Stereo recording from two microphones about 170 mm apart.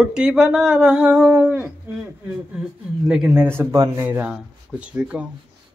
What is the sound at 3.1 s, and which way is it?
Speech, 5° right (ahead or behind).